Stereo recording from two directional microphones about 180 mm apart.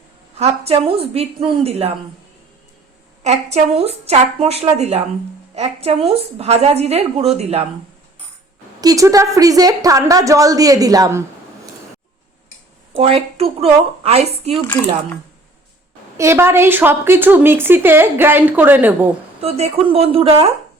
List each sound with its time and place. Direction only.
0.3 s a woman's voice: 35° right (ahead or behind)
3.2 s a woman's voice: 35° right (ahead or behind)
8.8 s a woman's voice: 20° right (ahead or behind)
13.0 s a woman's voice: 35° right (ahead or behind)
16.1 s a woman's voice: 15° right (ahead or behind)
19.4 s a woman's voice: 35° right (ahead or behind)